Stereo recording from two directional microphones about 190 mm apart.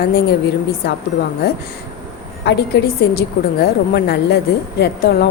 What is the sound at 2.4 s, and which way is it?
Speech, 60° left (ahead or behind).